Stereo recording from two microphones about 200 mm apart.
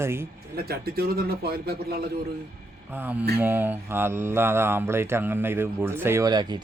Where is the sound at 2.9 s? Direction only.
10° right (ahead or behind).